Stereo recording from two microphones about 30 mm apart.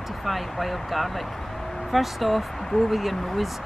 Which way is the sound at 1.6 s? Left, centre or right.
Centre.